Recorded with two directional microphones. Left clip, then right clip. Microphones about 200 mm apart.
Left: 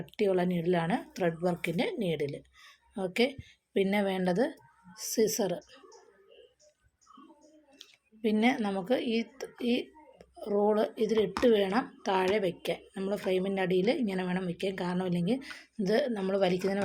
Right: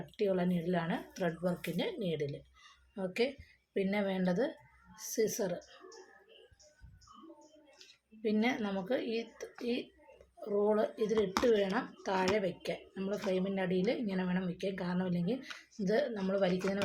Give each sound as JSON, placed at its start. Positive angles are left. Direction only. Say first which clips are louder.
{"t": 0.0, "sound": "speech", "louder": "left 5 dB", "side_deg": 45}
{"t": 8.2, "sound": "speech", "louder": "left 5 dB", "side_deg": 45}